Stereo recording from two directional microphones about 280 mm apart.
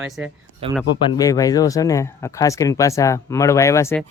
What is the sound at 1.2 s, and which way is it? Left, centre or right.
Speech, centre.